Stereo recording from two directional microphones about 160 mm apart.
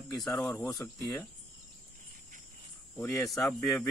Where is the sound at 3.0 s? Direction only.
20° left (ahead or behind).